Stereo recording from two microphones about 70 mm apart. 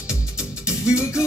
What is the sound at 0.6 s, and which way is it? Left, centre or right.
Music, left.